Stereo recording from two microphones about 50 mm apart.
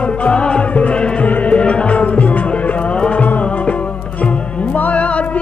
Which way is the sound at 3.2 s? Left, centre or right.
Left.